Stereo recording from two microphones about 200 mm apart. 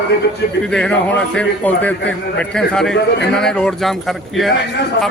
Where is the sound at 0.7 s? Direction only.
5° left (ahead or behind).